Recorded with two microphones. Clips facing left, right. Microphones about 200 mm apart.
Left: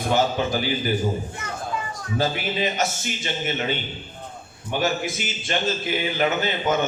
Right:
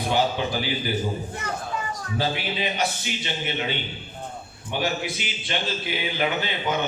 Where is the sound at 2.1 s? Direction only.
45° left (ahead or behind).